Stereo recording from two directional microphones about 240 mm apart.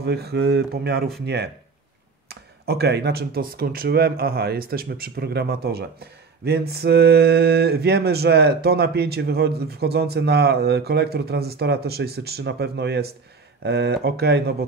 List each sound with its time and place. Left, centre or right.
0.0 s speech: right